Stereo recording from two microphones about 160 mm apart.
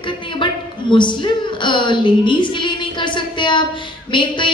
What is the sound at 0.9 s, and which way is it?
A woman's voice, 30° left (ahead or behind).